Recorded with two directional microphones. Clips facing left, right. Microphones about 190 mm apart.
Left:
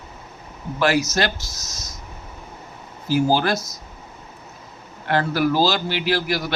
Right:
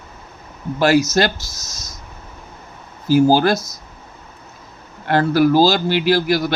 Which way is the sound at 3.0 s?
40° right (ahead or behind).